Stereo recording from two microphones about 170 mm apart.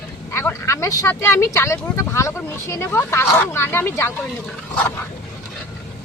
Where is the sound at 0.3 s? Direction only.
15° left (ahead or behind).